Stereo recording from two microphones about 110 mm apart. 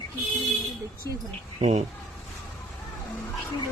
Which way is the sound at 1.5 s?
75° right (ahead or behind).